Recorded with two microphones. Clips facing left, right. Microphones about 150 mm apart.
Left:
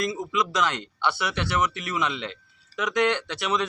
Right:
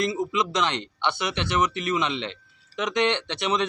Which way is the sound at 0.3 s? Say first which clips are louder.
Even; 20° right (ahead or behind).